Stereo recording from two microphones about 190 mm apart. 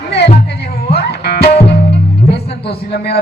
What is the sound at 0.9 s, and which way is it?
Music, 60° left (ahead or behind).